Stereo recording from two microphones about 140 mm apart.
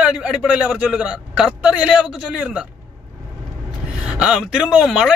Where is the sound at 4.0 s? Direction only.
5° right (ahead or behind).